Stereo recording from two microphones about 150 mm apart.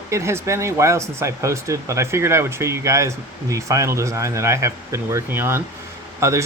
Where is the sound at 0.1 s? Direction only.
20° right (ahead or behind).